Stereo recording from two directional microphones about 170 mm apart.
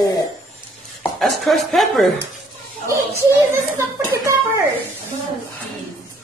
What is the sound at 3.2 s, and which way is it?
A child's voice, 15° right (ahead or behind).